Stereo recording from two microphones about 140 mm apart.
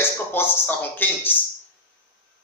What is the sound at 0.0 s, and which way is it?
A man's voice, 15° left (ahead or behind).